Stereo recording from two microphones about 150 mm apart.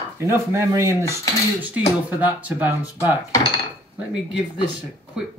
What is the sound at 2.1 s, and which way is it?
Speech, 10° right (ahead or behind).